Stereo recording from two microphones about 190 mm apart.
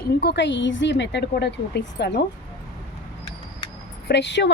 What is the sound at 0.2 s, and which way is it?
A woman's voice, 65° left (ahead or behind).